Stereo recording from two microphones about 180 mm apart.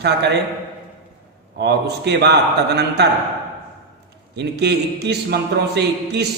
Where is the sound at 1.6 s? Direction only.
65° right (ahead or behind).